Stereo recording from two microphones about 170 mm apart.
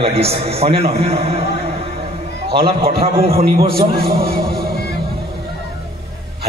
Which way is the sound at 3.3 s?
60° right (ahead or behind).